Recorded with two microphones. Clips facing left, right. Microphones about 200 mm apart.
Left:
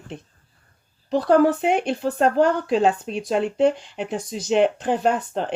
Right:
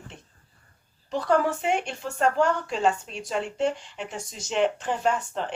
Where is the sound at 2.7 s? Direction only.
55° left (ahead or behind).